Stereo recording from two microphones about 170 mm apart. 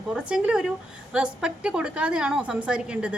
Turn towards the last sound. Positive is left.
turn(degrees=-5)  # may be behind; listen again after turning